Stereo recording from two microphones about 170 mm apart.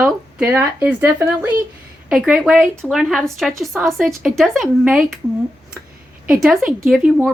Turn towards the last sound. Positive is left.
turn(degrees=0)  # may be behind; listen again after turning